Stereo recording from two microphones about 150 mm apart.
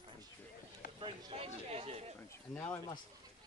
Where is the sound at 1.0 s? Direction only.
35° right (ahead or behind).